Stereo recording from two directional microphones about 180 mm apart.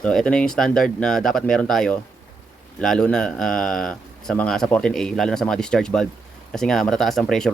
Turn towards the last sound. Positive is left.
turn(degrees=5)  # may be behind; listen again after turning